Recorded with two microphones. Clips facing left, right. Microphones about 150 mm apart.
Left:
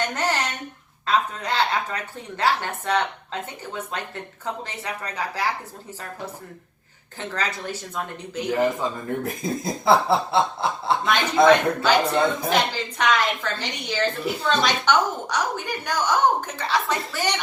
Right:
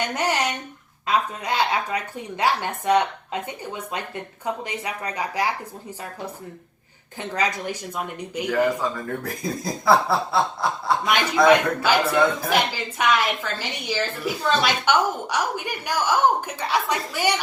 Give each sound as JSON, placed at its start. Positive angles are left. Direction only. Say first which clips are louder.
{"t": 0.0, "sound": "a sound", "louder": "right 1 dB", "side_deg": -15}
{"t": 1.0, "sound": "a woman's voice", "louder": "even", "side_deg": -10}
{"t": 7.2, "sound": "a woman's voice", "louder": "right 3 dB", "side_deg": -15}
{"t": 8.4, "sound": "speech", "louder": "right 1 dB", "side_deg": 20}
{"t": 11.0, "sound": "a woman's voice", "louder": "left 1 dB", "side_deg": -15}
{"t": 12.0, "sound": "speech", "louder": "right 1 dB", "side_deg": 20}
{"t": 12.5, "sound": "a woman's voice", "louder": "even", "side_deg": -10}